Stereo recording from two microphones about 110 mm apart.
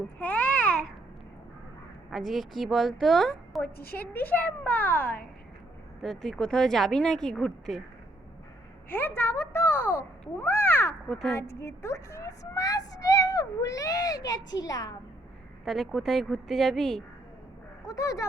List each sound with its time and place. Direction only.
0.2 s babbling: 15° left (ahead or behind)
2.0 s speech: centre (ahead or behind)
3.6 s a woman's voice: 15° left (ahead or behind)
6.0 s speech: 5° left (ahead or behind)
8.9 s a child's voice: 20° left (ahead or behind)
11.1 s speech: 5° left (ahead or behind)
11.3 s a child's voice: 25° left (ahead or behind)
15.6 s speech: centre (ahead or behind)
17.8 s a child's voice: 30° left (ahead or behind)